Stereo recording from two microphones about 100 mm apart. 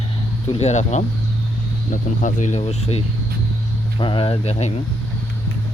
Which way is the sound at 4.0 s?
55° left (ahead or behind).